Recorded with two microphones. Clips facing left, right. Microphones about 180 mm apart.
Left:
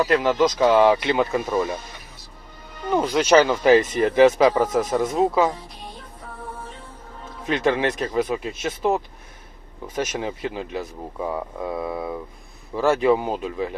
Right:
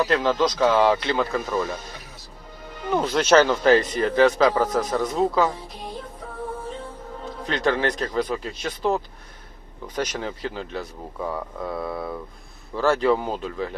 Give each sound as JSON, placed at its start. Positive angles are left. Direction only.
{"t": 0.1, "sound": "speech", "side_deg": 5}
{"t": 2.9, "sound": "speech", "side_deg": 10}
{"t": 7.4, "sound": "speech", "side_deg": 15}
{"t": 10.0, "sound": "speech", "side_deg": 10}